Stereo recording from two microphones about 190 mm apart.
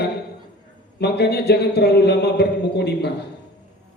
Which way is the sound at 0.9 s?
60° left (ahead or behind).